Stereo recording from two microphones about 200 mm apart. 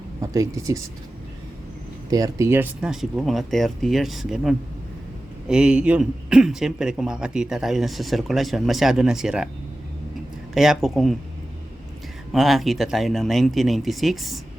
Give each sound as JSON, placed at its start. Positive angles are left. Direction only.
{"t": 0.2, "sound": "speech", "side_deg": -15}
{"t": 2.0, "sound": "a man's voice", "side_deg": -15}
{"t": 10.5, "sound": "a man's voice", "side_deg": 0}
{"t": 12.3, "sound": "a man's voice", "side_deg": 0}